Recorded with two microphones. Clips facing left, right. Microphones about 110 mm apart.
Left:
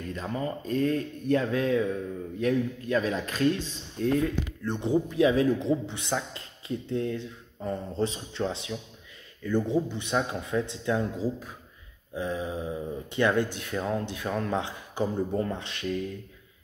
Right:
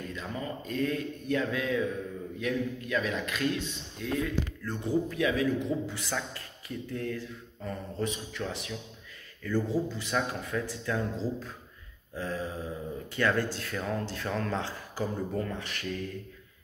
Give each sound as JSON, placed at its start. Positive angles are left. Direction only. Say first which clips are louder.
{"t": 0.1, "sound": "speech", "louder": "left 8 dB", "side_deg": 35}
{"t": 4.6, "sound": "a man's voice", "louder": "left 4 dB", "side_deg": 25}
{"t": 11.1, "sound": "a man's voice", "louder": "left 3 dB", "side_deg": 15}